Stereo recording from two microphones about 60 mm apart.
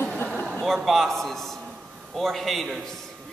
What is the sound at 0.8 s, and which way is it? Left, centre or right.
A man's voice, centre.